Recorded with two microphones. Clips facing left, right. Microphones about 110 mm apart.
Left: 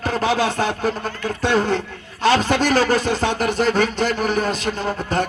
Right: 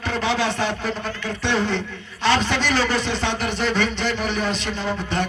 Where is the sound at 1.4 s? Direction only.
45° left (ahead or behind).